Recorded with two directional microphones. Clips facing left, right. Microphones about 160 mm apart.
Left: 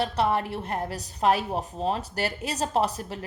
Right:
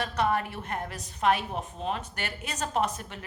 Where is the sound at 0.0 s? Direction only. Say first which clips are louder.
Left 3 dB; 30° left (ahead or behind).